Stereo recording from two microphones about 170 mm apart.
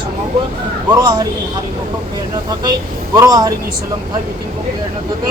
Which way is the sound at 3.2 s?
20° right (ahead or behind).